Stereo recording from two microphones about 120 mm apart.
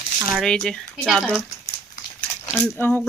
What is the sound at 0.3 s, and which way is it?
Speech, 5° left (ahead or behind).